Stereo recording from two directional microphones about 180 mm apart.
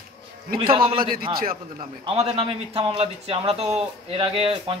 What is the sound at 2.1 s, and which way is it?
A man's voice, 30° right (ahead or behind).